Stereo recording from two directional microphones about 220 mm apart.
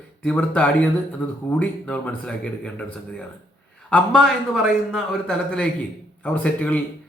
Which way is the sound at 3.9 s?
Centre (ahead or behind).